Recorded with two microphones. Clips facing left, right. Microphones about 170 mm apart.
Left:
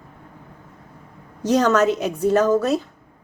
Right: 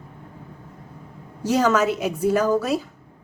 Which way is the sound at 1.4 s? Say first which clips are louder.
Left 2 dB; 5° right (ahead or behind).